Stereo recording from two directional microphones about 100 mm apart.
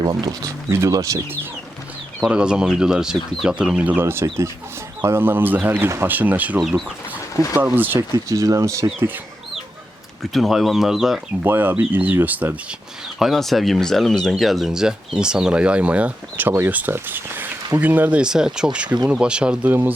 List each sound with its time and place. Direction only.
0.0 s speech: 40° right (ahead or behind)
2.3 s speech: 10° right (ahead or behind)
4.0 s speech: 25° right (ahead or behind)
7.6 s speech: 20° right (ahead or behind)
7.9 s speech: 35° right (ahead or behind)
10.3 s speech: centre (ahead or behind)
11.4 s speech: 20° right (ahead or behind)
13.1 s speech: centre (ahead or behind)